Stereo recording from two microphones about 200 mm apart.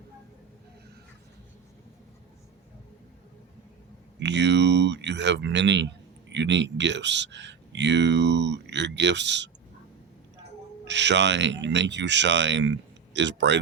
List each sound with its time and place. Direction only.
4.2 s speech: 60° right (ahead or behind)
10.8 s speech: 60° right (ahead or behind)